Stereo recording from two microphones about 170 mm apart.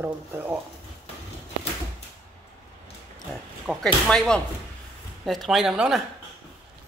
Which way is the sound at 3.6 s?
5° left (ahead or behind).